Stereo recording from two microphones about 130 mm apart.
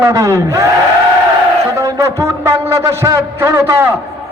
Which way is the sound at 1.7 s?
25° right (ahead or behind).